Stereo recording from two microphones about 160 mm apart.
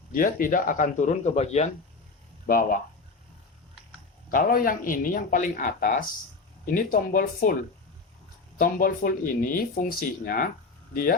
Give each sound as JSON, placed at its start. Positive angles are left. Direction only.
{"t": 0.1, "sound": "speech", "side_deg": 65}
{"t": 2.5, "sound": "speech", "side_deg": 60}
{"t": 4.3, "sound": "speech", "side_deg": 65}
{"t": 8.5, "sound": "speech", "side_deg": 60}